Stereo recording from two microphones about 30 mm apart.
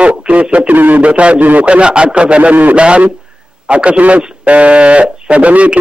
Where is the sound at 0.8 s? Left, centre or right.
Right.